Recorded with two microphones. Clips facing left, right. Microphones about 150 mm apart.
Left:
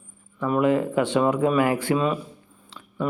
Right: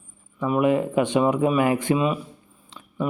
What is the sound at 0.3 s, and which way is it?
Speech, 15° right (ahead or behind).